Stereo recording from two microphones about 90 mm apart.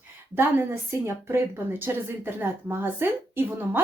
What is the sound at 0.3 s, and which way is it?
A woman's voice, 25° right (ahead or behind).